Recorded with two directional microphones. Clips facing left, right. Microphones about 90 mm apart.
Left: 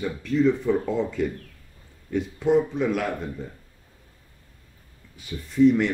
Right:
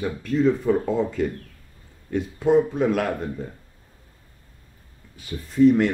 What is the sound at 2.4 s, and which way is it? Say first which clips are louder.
Speech: right 3 dB; 45° right (ahead or behind).